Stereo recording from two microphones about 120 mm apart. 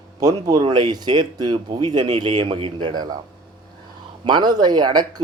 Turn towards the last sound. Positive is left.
turn(degrees=-35)  # may be behind; listen again after turning